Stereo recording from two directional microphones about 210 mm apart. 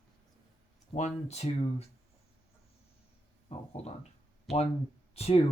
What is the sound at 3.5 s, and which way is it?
Speech, 30° left (ahead or behind).